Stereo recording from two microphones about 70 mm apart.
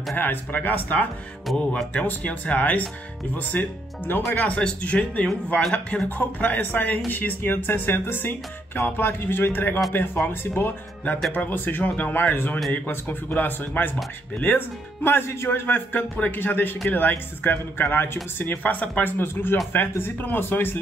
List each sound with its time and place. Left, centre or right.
0.1 s speech: left
1.5 s speech: centre
2.0 s speech: centre
6.0 s speech: left
15.0 s a man's voice: left